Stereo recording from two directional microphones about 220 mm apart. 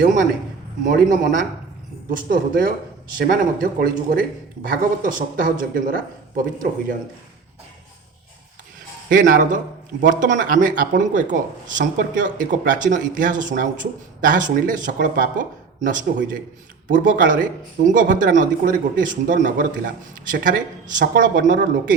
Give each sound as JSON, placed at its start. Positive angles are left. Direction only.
{"t": 0.0, "sound": "a man's voice", "side_deg": -40}
{"t": 9.0, "sound": "a man's voice", "side_deg": -35}